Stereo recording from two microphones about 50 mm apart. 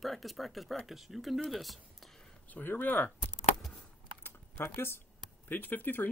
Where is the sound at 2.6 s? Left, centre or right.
Left.